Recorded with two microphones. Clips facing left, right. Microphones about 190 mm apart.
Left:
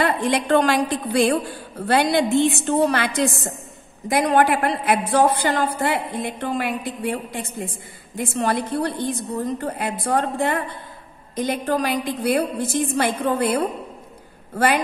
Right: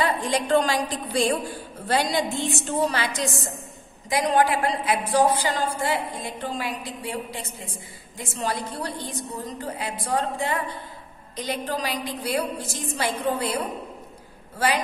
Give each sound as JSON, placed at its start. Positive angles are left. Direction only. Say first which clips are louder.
{"t": 0.0, "sound": "a woman's voice", "louder": "left 4 dB", "side_deg": 65}